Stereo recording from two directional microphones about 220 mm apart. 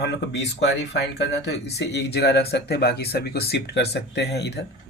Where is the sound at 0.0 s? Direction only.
50° left (ahead or behind).